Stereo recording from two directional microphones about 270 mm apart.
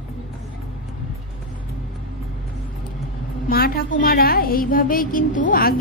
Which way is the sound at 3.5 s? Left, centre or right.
Left.